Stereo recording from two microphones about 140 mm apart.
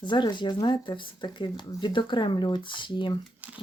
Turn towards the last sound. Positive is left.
turn(degrees=-10)  # may be behind; listen again after turning